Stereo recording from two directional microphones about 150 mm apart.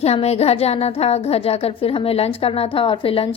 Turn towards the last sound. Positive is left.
turn(degrees=40)  # may be behind; listen again after turning